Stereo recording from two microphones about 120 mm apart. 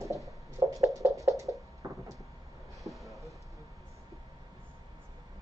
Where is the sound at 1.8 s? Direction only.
30° right (ahead or behind).